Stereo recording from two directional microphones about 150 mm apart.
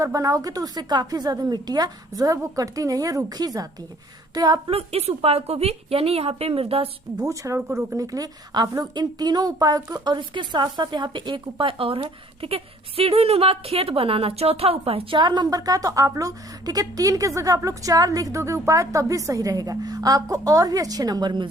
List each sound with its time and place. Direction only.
0.0 s a woman's voice: 20° right (ahead or behind)
4.7 s a woman's voice: 40° right (ahead or behind)
7.2 s a woman's voice: 20° right (ahead or behind)